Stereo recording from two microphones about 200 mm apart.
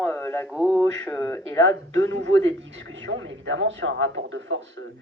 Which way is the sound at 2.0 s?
65° right (ahead or behind).